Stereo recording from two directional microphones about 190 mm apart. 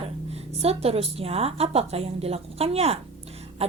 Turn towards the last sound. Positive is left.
turn(degrees=-35)  # may be behind; listen again after turning